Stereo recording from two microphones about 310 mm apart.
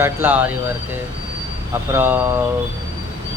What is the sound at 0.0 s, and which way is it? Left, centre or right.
Speech, centre.